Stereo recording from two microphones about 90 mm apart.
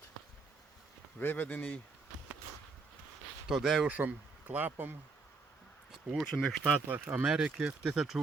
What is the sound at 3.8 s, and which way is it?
Speech, 15° right (ahead or behind).